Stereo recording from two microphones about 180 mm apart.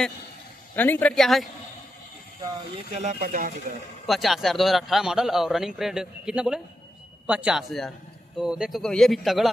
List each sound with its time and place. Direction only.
0.7 s a man's voice: 10° left (ahead or behind)
2.9 s speech: 40° right (ahead or behind)
4.1 s a man's voice: centre (ahead or behind)